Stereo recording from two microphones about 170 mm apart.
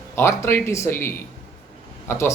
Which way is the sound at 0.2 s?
15° left (ahead or behind).